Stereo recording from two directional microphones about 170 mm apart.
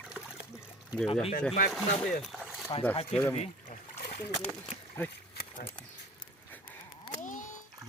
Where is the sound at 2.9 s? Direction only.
35° left (ahead or behind).